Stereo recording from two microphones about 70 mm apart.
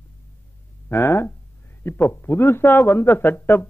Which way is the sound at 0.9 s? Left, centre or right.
Left.